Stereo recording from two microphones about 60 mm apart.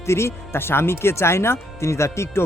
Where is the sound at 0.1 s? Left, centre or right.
Left.